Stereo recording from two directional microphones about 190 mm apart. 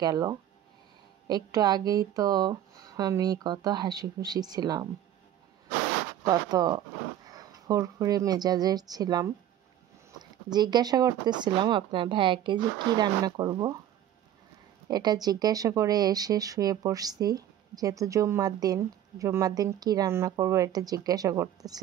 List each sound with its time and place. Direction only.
0.0 s speech: 20° right (ahead or behind)
6.2 s speech: 20° right (ahead or behind)
10.5 s speech: 20° right (ahead or behind)
14.9 s speech: 20° right (ahead or behind)